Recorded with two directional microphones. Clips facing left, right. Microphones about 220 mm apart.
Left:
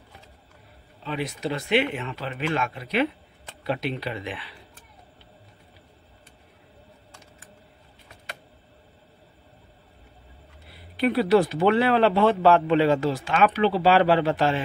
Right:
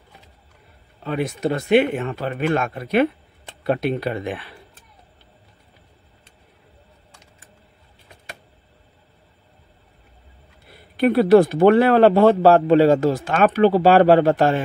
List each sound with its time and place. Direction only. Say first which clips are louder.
1.0 s speech: right 6 dB; 50° right (ahead or behind)
10.7 s speech: right 6 dB; 50° right (ahead or behind)